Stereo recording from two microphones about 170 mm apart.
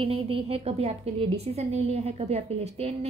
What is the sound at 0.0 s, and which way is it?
A woman's voice, 35° right (ahead or behind).